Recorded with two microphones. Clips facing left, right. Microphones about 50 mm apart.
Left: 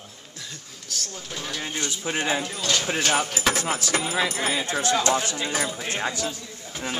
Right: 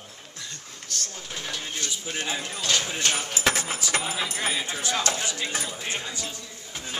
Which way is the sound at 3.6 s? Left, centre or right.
Left.